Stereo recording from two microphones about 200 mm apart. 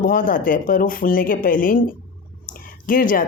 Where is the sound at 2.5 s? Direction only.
45° left (ahead or behind).